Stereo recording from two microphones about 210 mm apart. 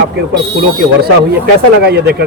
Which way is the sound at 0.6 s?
50° right (ahead or behind).